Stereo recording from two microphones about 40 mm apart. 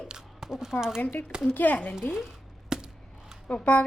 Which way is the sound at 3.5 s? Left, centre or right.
Left.